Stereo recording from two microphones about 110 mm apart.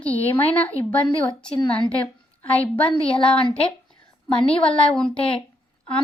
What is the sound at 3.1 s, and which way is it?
A woman's voice, 55° left (ahead or behind).